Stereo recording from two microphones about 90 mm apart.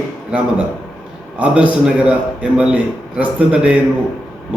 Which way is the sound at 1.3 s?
15° right (ahead or behind).